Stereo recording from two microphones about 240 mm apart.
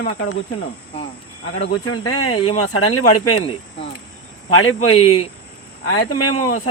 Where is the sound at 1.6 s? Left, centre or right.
Left.